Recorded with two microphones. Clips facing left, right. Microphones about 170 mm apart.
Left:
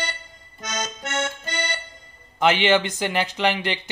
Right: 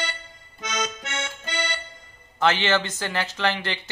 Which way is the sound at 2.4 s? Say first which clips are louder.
Left 3 dB; 15° left (ahead or behind).